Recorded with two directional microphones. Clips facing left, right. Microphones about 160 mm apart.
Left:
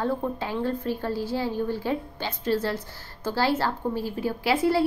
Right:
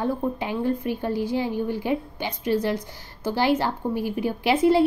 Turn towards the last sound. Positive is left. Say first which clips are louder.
# right 4 dB
turn(degrees=-20)  # may be behind; listen again after turning